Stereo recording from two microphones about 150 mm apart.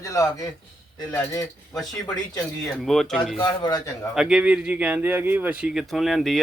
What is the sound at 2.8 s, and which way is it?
Speech, centre (ahead or behind).